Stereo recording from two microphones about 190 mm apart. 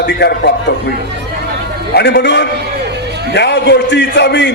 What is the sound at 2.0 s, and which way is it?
A man's voice, 60° left (ahead or behind).